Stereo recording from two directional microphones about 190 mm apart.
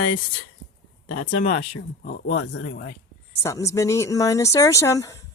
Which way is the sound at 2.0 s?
50° left (ahead or behind).